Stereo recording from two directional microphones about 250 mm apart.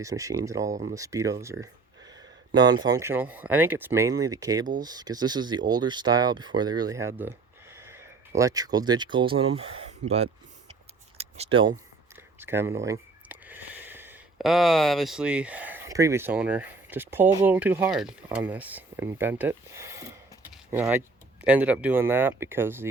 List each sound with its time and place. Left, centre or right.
0.0 s speech: centre
11.2 s a sound: right
12.4 s speech: centre